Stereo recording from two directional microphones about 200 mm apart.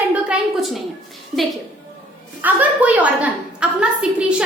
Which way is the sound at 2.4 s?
10° right (ahead or behind).